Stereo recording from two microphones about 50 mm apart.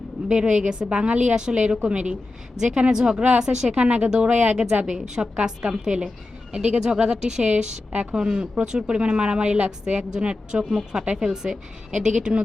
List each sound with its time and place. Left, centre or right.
0.3 s a woman's voice: centre